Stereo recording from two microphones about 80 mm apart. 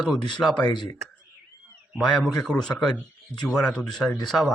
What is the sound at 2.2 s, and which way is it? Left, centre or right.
Speech, centre.